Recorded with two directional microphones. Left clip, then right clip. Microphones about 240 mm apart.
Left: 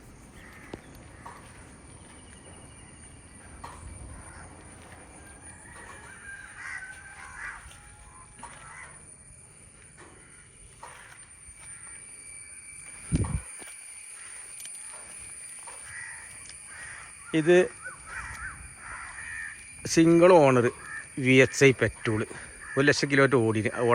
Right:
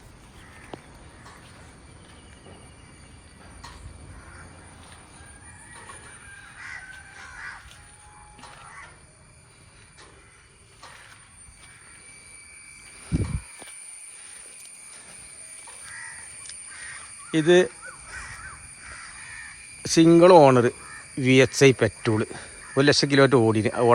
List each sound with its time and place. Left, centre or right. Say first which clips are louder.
17.3 s speech: right 3 dB; centre
19.8 s speech: right 4 dB; centre